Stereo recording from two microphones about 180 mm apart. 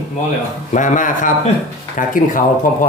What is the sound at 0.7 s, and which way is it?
Speech, 45° left (ahead or behind).